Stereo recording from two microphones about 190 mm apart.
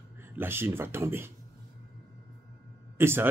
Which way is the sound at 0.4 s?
10° right (ahead or behind).